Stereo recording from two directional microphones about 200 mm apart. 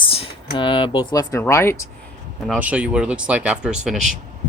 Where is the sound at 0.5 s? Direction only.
25° left (ahead or behind).